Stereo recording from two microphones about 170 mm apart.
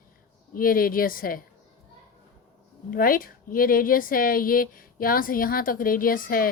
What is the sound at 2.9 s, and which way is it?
Speech, 55° left (ahead or behind).